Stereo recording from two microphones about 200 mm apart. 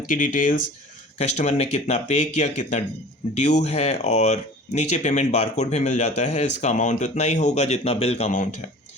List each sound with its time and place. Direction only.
0.1 s speech: 40° left (ahead or behind)